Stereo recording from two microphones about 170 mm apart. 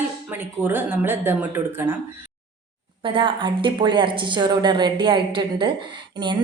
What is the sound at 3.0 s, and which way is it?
A woman's voice, 30° right (ahead or behind).